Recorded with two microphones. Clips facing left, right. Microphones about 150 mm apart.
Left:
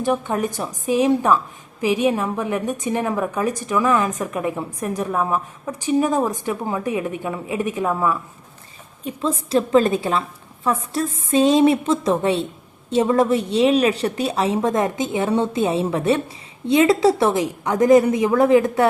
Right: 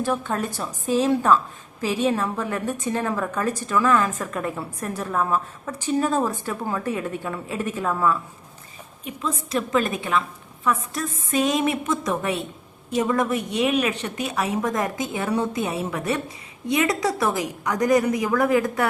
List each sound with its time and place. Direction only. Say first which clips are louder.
0.0 s a woman's voice: left 4 dB; 15° left (ahead or behind)
9.0 s a woman's voice: left 5 dB; 30° left (ahead or behind)